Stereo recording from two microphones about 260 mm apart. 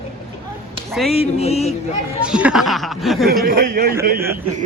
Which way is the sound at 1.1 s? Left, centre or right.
Left.